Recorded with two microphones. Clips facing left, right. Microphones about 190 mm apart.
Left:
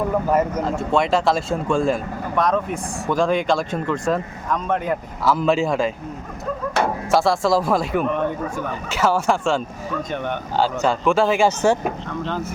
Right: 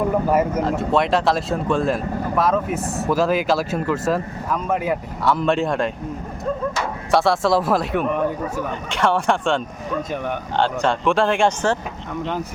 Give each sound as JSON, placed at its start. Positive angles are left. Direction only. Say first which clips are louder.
{"t": 0.3, "sound": "speech", "louder": "right 1 dB", "side_deg": -10}
{"t": 6.8, "sound": "a sound", "louder": "left 5 dB", "side_deg": 60}
{"t": 7.1, "sound": "speech", "louder": "right 1 dB", "side_deg": 0}